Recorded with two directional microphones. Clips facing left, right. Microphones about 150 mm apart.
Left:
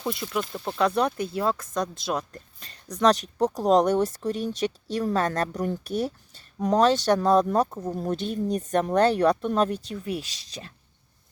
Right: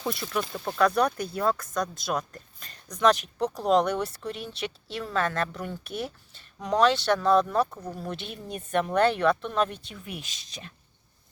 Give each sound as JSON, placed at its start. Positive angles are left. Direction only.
{"t": 0.1, "sound": "speech", "side_deg": 15}
{"t": 0.5, "sound": "speech", "side_deg": 5}
{"t": 0.8, "sound": "speech", "side_deg": 25}
{"t": 7.7, "sound": "speech", "side_deg": 20}
{"t": 7.9, "sound": "speech", "side_deg": 45}